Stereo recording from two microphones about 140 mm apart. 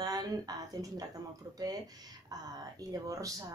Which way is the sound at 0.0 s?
25° right (ahead or behind).